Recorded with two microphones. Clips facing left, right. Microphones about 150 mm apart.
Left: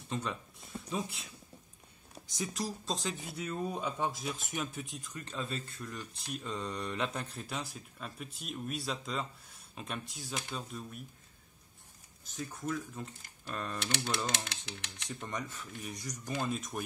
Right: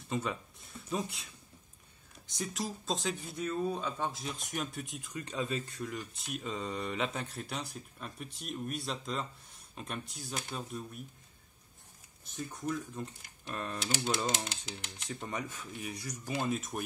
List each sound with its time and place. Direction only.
0.1 s speech: 5° right (ahead or behind)
2.4 s speech: centre (ahead or behind)
3.3 s speech: 10° left (ahead or behind)
4.4 s speech: centre (ahead or behind)
5.1 s speech: 15° right (ahead or behind)
5.8 s speech: 30° right (ahead or behind)
6.1 s speech: 5° right (ahead or behind)
12.4 s speech: centre (ahead or behind)